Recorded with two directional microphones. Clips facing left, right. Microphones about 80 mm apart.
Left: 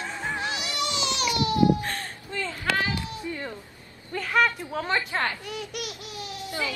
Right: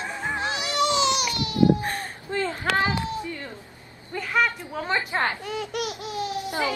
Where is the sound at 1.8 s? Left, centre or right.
Centre.